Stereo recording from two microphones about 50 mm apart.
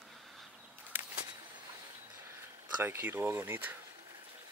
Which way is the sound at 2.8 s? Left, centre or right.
Right.